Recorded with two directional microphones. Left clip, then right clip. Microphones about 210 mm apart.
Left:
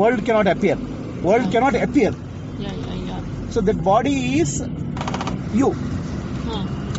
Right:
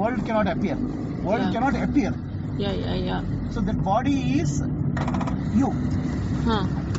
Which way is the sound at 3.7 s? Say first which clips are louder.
Left 6 dB; 45° left (ahead or behind).